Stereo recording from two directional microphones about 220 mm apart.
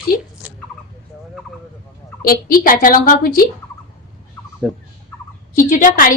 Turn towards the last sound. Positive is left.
turn(degrees=35)  # may be behind; listen again after turning